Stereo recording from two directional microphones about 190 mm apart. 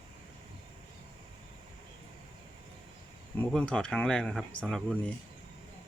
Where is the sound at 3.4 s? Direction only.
5° left (ahead or behind).